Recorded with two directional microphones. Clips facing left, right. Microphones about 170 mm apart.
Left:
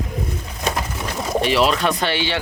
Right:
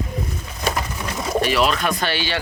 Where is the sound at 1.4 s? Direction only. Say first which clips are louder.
Left 3 dB; 25° left (ahead or behind).